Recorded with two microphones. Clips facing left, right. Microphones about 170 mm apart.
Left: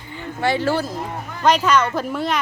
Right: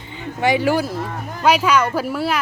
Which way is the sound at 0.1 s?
15° right (ahead or behind).